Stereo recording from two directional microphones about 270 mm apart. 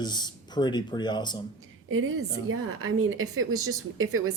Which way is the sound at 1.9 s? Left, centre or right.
Right.